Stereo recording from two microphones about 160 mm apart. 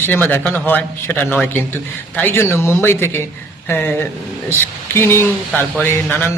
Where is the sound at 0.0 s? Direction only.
10° left (ahead or behind).